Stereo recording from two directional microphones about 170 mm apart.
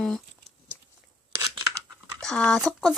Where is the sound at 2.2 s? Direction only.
5° left (ahead or behind).